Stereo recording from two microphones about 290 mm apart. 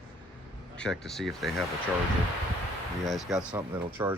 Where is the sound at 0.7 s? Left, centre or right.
Centre.